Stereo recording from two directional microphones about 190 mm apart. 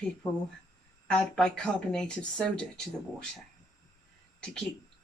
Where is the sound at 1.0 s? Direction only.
5° left (ahead or behind).